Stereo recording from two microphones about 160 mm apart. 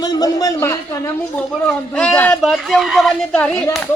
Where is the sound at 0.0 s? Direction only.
25° left (ahead or behind).